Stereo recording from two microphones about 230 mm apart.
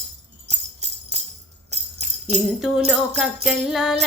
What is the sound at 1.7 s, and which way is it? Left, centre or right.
Music, right.